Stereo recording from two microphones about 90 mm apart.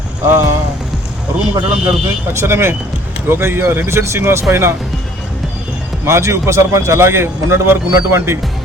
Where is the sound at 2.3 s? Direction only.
30° right (ahead or behind).